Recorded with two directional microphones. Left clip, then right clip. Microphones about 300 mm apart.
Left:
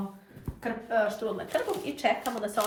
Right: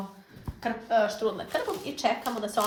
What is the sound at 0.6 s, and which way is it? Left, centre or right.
Speech, right.